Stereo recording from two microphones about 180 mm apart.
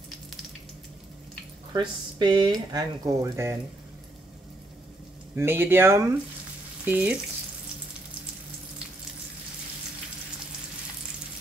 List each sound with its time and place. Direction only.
1.7 s speech: 25° right (ahead or behind)
5.3 s speech: 10° right (ahead or behind)
6.8 s frying: 10° right (ahead or behind)